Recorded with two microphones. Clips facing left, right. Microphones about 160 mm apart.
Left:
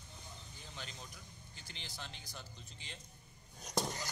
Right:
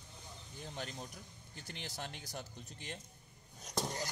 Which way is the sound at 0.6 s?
50° right (ahead or behind).